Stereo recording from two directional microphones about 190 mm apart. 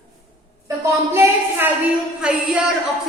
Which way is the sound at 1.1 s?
10° right (ahead or behind).